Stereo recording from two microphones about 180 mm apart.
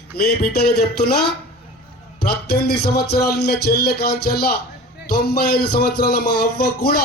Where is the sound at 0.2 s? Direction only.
60° left (ahead or behind).